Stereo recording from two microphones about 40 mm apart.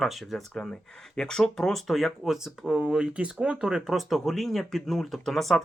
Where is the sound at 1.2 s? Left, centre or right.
Centre.